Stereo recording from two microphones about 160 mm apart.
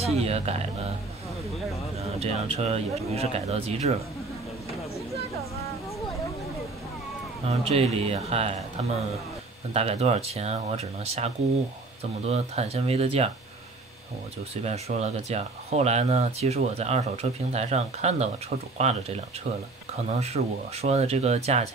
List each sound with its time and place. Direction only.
0.0 s speech: 40° right (ahead or behind)
2.0 s speech: 40° right (ahead or behind)
7.4 s speech: 40° right (ahead or behind)
9.8 s speech: 40° right (ahead or behind)
14.5 s speech: 40° right (ahead or behind)